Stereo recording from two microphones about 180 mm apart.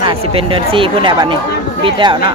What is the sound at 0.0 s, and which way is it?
Speech, 30° right (ahead or behind).